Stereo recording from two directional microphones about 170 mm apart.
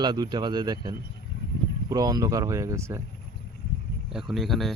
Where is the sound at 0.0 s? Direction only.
25° right (ahead or behind).